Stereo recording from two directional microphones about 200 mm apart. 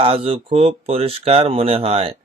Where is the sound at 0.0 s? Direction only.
30° right (ahead or behind).